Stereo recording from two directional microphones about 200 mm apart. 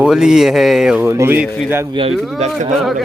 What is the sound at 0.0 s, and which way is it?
Speech, 5° right (ahead or behind).